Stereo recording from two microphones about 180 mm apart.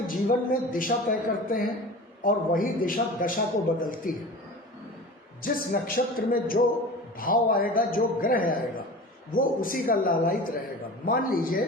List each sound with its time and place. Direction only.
0.1 s a man's voice: 50° left (ahead or behind)
5.4 s a man's voice: 50° left (ahead or behind)